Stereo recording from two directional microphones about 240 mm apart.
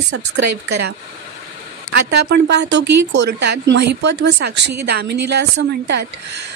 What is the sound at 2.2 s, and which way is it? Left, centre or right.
Speech, right.